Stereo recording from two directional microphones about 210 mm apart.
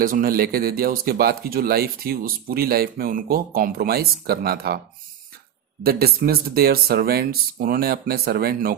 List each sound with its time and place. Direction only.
0.0 s speech: 45° right (ahead or behind)
5.8 s speech: 45° right (ahead or behind)